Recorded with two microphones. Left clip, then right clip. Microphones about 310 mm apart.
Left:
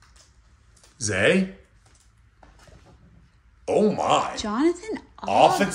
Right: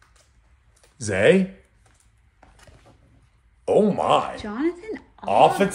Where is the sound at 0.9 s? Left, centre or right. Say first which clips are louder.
Right 3 dB; centre.